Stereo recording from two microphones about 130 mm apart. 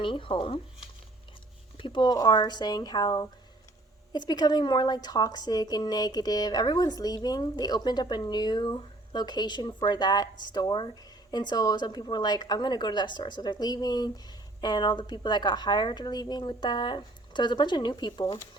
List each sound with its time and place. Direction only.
0.0 s a woman's voice: 40° left (ahead or behind)
1.8 s a woman's voice: 35° left (ahead or behind)